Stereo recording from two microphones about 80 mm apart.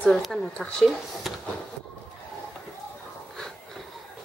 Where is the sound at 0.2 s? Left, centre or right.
Centre.